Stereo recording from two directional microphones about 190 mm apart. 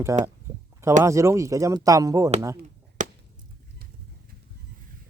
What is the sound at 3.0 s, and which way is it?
Chop, 40° right (ahead or behind).